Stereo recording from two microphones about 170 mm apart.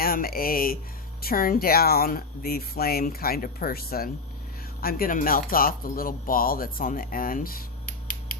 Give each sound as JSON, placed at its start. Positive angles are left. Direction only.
{"t": 0.0, "sound": "speech", "side_deg": 60}